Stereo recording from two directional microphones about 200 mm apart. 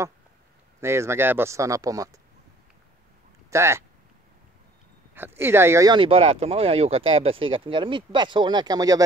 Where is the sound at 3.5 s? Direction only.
15° right (ahead or behind).